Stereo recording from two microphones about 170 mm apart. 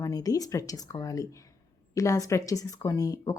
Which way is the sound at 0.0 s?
20° left (ahead or behind).